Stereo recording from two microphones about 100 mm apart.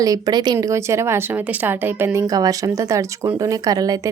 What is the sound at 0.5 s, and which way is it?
A woman's voice, 30° right (ahead or behind).